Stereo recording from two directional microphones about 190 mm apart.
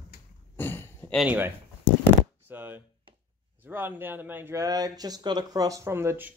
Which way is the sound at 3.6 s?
10° right (ahead or behind).